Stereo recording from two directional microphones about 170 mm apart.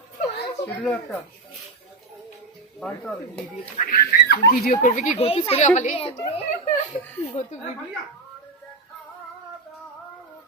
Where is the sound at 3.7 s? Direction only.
55° left (ahead or behind); by 6.8 s 35° left (ahead or behind).